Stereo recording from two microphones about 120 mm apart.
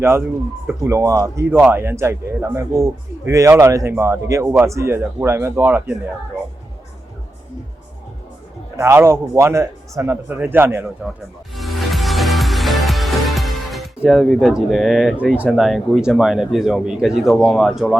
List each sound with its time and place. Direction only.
0.0 s speech: 20° right (ahead or behind)
8.7 s speech: 20° right (ahead or behind)
11.5 s music: centre (ahead or behind)
15.4 s a man's voice: centre (ahead or behind)